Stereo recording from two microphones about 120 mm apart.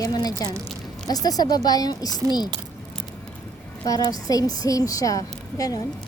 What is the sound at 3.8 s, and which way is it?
A woman's voice, 30° left (ahead or behind).